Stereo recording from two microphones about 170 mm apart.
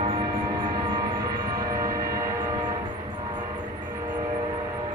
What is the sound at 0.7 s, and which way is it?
Gong, 30° right (ahead or behind).